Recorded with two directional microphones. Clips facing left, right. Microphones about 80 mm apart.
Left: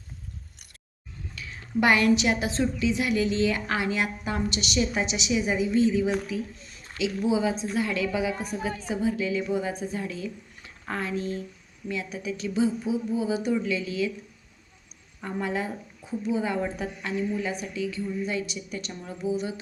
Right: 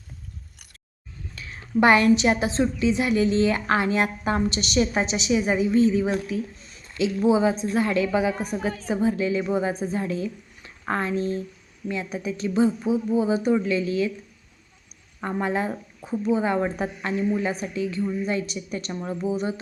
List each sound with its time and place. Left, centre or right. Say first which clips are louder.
1.4 s a woman's voice: right 5 dB; right
15.2 s a woman's voice: right 4 dB; right